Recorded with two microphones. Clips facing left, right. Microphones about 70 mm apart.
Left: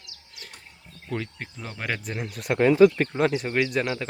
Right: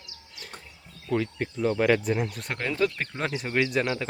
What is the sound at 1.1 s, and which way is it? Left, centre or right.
Speech, centre.